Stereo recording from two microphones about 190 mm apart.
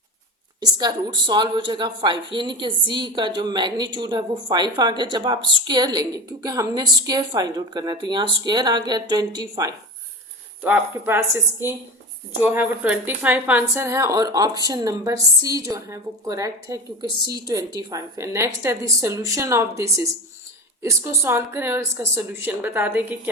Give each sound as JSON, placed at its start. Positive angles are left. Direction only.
{"t": 0.6, "sound": "a woman's voice", "side_deg": -20}
{"t": 10.6, "sound": "speech", "side_deg": -10}